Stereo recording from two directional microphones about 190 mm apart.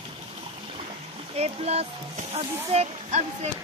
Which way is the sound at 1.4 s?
35° right (ahead or behind).